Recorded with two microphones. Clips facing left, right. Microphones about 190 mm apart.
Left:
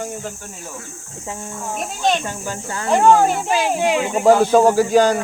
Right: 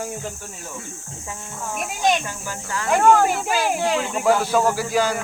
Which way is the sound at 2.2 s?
30° left (ahead or behind).